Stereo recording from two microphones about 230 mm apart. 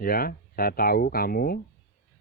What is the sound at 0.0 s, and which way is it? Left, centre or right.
A man's voice, left.